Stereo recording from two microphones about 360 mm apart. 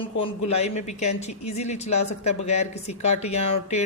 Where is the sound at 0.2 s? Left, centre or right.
Centre.